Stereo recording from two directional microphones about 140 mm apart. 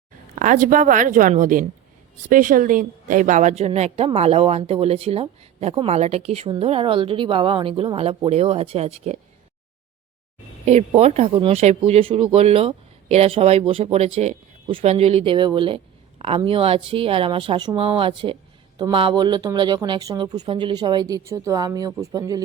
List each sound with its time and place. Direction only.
0.3 s a woman's voice: 65° right (ahead or behind); by 9.1 s 45° right (ahead or behind)
10.7 s speech: 50° right (ahead or behind); by 22.4 s 25° right (ahead or behind)